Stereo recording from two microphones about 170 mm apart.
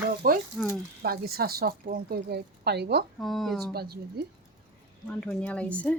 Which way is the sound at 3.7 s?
65° right (ahead or behind).